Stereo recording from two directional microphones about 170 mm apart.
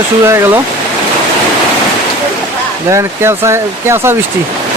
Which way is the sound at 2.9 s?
15° right (ahead or behind).